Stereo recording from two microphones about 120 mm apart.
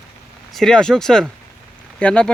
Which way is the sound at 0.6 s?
5° left (ahead or behind).